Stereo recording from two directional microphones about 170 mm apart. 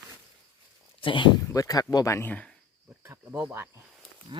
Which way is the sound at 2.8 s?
15° right (ahead or behind).